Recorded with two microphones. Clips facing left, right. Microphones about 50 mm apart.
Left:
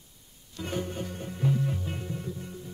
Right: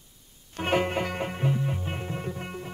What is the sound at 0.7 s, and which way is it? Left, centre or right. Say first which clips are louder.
Music: right 8 dB; right.